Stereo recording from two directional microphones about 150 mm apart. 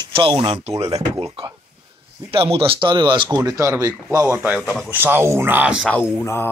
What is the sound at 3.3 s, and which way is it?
Speech, 20° right (ahead or behind).